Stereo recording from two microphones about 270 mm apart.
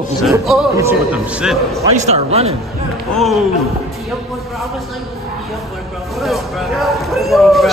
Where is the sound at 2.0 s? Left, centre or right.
Right.